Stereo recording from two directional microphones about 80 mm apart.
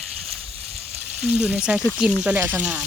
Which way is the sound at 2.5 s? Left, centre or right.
Right.